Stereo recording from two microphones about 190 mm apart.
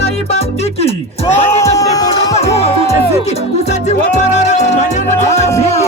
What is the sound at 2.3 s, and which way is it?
Music, 35° left (ahead or behind).